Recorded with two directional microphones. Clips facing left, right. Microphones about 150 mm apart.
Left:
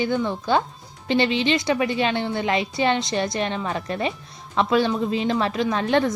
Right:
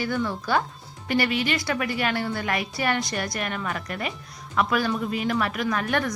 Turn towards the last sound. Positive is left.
turn(degrees=25)  # may be behind; listen again after turning